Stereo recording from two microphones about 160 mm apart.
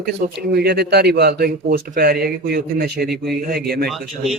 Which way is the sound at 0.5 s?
85° right.